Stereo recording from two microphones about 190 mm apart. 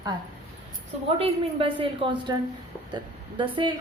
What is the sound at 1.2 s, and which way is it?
A woman's voice, 30° right (ahead or behind).